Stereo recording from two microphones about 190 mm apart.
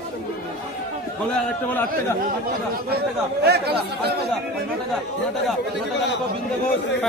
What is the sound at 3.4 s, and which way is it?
Speech, 60° right (ahead or behind).